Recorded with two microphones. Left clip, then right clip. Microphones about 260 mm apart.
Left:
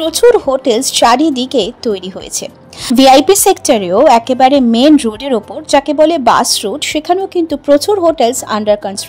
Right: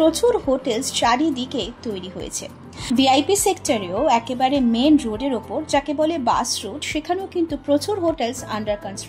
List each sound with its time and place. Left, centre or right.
0.0 s a woman's voice: left